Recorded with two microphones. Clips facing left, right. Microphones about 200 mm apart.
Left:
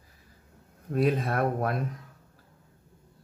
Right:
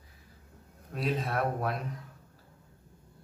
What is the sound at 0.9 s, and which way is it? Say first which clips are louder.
Speech: left 6 dB; 55° left (ahead or behind).